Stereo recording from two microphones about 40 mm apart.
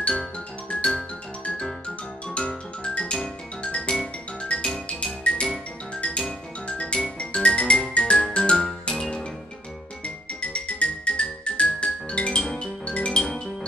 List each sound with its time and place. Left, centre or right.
2.2 s music: left